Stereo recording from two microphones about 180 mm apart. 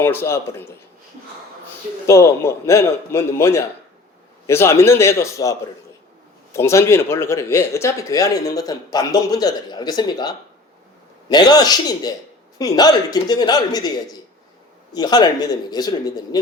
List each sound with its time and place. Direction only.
0.0 s a man's voice: 15° left (ahead or behind)
2.0 s a man's voice: 15° left (ahead or behind)